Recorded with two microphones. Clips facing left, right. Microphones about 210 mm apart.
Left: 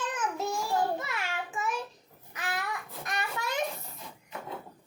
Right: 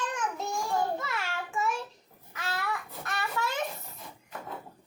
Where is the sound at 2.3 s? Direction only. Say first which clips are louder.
Even; 15° left (ahead or behind).